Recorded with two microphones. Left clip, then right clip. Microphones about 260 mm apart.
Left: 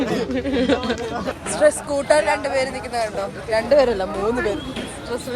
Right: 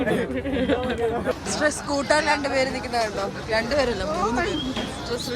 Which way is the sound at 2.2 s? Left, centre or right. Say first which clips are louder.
Left 2 dB; centre.